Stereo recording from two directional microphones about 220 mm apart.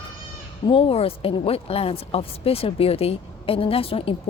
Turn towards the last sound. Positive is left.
turn(degrees=25)  # may be behind; listen again after turning